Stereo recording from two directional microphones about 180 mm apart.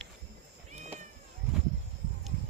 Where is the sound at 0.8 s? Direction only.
40° right (ahead or behind).